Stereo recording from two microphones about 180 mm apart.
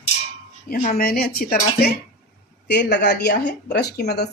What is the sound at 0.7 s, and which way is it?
Speech, 50° left (ahead or behind).